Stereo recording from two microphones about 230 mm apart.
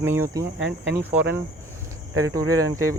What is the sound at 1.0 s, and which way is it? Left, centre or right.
Cricket, centre.